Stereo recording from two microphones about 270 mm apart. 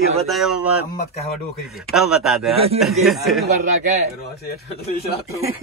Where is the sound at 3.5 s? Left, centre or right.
Right.